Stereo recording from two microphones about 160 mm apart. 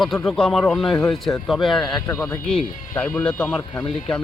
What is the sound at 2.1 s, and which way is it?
Speech, 15° left (ahead or behind).